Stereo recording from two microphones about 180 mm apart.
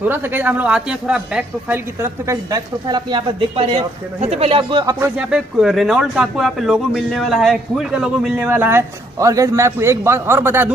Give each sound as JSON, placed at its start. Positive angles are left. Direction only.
{"t": 0.1, "sound": "speech", "side_deg": -10}
{"t": 5.0, "sound": "speech", "side_deg": -5}